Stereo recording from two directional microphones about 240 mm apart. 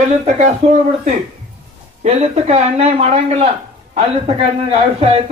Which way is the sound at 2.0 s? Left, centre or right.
Right.